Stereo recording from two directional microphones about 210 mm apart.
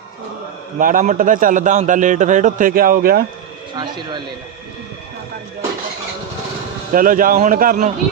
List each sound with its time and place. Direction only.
0.8 s a man's voice: 40° right (ahead or behind)
3.8 s speech: 20° right (ahead or behind)
6.9 s a man's voice: 40° right (ahead or behind)